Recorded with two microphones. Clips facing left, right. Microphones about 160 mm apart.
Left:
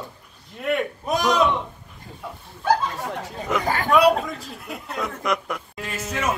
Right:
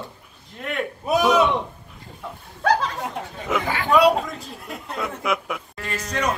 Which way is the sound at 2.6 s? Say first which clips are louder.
Right 1 dB; 85° right.